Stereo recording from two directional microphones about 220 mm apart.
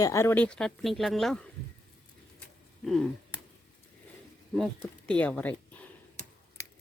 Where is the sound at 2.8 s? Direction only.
Centre (ahead or behind).